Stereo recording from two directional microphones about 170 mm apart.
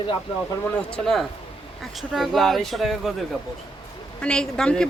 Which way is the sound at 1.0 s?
Centre (ahead or behind).